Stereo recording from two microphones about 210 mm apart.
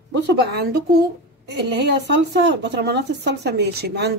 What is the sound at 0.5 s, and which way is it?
Speech, 50° right (ahead or behind).